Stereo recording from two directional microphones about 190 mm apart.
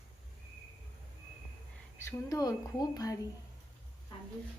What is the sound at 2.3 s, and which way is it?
Speech, 20° left (ahead or behind).